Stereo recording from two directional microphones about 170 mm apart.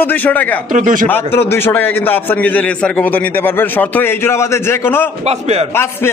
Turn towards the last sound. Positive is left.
turn(degrees=-40)  # may be behind; listen again after turning